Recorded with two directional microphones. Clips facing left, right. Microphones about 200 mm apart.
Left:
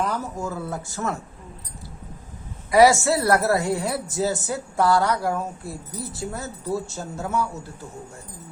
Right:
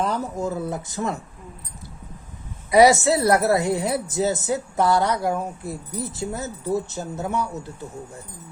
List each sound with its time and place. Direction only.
0.0 s speech: 20° right (ahead or behind)
2.6 s speech: 20° right (ahead or behind)